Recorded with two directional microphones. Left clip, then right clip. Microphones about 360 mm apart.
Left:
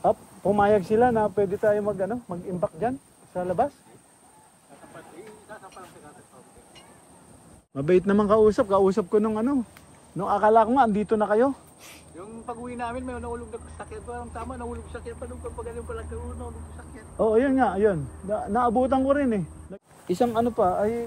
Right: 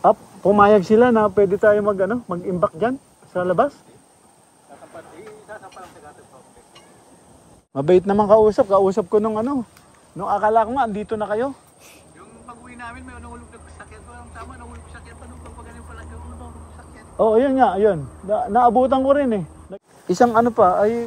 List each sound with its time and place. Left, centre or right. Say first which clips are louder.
0.0 s speech: right 7 dB; right
7.7 s a man's voice: right 6 dB; centre
12.2 s a man's voice: left 6 dB; centre
17.2 s a man's voice: right 6 dB; centre